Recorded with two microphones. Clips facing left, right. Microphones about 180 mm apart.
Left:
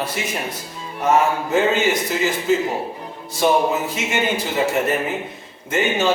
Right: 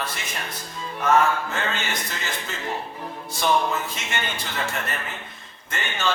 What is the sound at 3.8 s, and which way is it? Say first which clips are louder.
A man's voice: left 7 dB; 5° left (ahead or behind).